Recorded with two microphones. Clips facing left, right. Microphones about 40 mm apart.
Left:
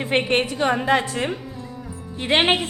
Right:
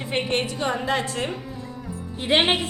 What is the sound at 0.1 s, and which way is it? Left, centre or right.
Speech, left.